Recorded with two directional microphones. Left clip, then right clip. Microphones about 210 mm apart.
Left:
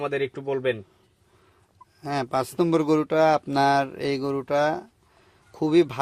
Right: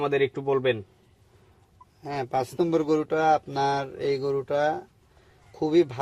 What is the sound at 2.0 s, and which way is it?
A man's voice, 30° left (ahead or behind).